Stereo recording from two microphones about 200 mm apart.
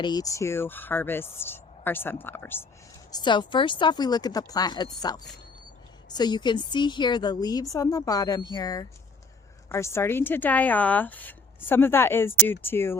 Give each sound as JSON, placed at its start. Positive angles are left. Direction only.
{"t": 0.0, "sound": "speech", "side_deg": 20}
{"t": 3.1, "sound": "speech", "side_deg": 20}